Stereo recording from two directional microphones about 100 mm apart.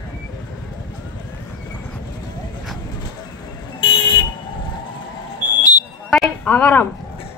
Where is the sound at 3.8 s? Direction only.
55° left (ahead or behind).